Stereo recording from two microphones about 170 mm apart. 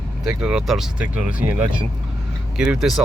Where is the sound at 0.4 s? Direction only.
Centre (ahead or behind).